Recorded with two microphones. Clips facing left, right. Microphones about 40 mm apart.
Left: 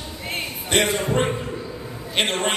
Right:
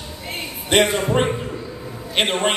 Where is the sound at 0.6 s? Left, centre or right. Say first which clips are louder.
Right 4 dB; centre.